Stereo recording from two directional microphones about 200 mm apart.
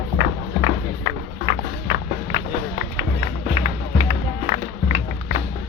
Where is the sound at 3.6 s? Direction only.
40° left (ahead or behind).